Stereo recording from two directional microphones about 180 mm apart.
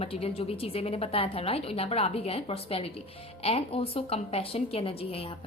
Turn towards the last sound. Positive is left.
turn(degrees=30)  # may be behind; listen again after turning